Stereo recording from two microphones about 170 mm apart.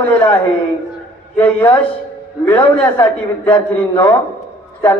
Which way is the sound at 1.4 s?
10° left (ahead or behind).